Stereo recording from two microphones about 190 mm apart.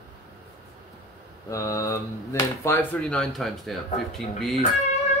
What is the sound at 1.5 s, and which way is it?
Mantra, 15° left (ahead or behind).